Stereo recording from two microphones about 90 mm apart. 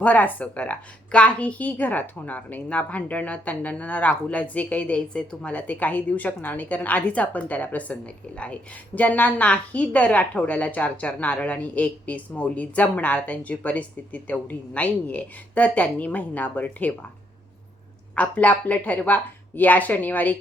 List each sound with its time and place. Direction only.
0.0 s a woman's voice: 20° left (ahead or behind)
18.1 s a woman's voice: 15° left (ahead or behind)